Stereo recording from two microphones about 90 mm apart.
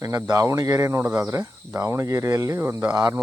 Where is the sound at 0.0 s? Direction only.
30° right (ahead or behind).